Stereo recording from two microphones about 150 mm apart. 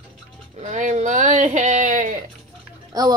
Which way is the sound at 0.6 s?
55° right (ahead or behind).